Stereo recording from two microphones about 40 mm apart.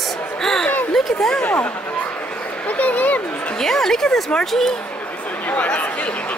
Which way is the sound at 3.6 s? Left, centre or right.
Centre.